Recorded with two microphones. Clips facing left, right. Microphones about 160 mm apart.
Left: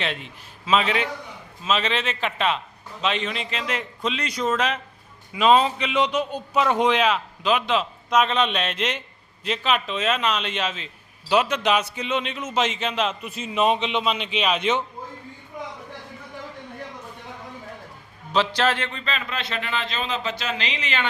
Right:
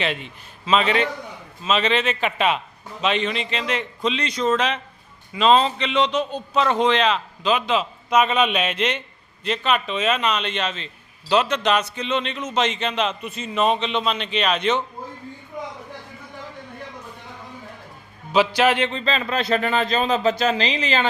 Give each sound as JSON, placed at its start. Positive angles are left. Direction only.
{"t": 0.0, "sound": "a man's voice", "side_deg": 0}
{"t": 18.3, "sound": "speech", "side_deg": -10}